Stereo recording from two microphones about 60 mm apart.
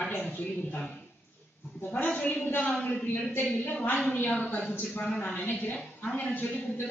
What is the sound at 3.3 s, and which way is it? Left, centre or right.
A woman's voice, left.